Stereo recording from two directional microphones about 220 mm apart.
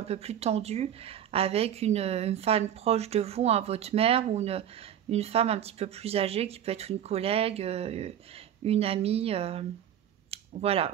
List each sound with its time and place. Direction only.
0.0 s a woman's voice: 30° right (ahead or behind)